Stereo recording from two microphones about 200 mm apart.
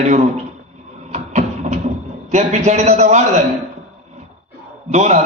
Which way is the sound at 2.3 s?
35° right (ahead or behind).